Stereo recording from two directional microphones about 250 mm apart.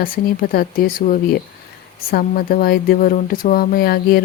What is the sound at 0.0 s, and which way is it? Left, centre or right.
Speech, left.